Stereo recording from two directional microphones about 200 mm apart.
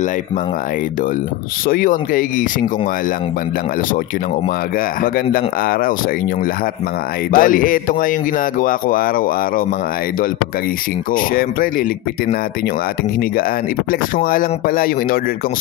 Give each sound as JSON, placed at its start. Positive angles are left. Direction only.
{"t": 1.7, "sound": "speech", "side_deg": 40}
{"t": 5.0, "sound": "speech", "side_deg": 45}
{"t": 7.3, "sound": "speech", "side_deg": 45}
{"t": 11.1, "sound": "speech", "side_deg": 45}
{"t": 14.1, "sound": "speech", "side_deg": 45}